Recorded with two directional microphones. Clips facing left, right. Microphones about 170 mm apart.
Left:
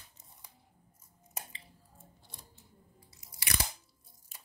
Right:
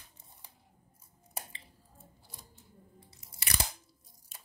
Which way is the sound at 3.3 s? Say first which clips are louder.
Left 1 dB; 30° right (ahead or behind).